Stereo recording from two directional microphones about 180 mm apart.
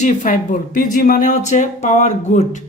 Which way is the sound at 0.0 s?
40° left (ahead or behind).